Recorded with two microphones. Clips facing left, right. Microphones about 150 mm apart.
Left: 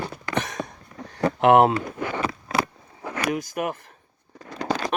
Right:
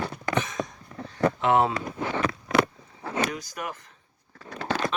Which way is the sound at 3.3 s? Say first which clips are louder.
Left 8 dB; 50° left (ahead or behind).